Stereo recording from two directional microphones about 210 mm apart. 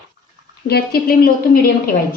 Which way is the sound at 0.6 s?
50° left (ahead or behind).